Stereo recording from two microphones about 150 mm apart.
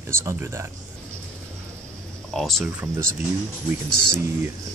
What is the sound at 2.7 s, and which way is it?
Speech, 10° right (ahead or behind).